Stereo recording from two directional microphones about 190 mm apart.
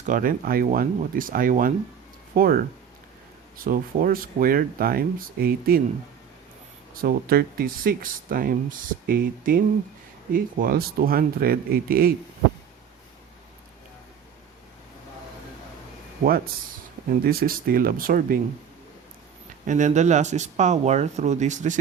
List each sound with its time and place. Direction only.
0.0 s speech: 45° right (ahead or behind)
3.6 s speech: 45° right (ahead or behind)
6.9 s speech: 50° right (ahead or behind)
17.1 s speech: 50° right (ahead or behind)
19.6 s speech: 40° right (ahead or behind)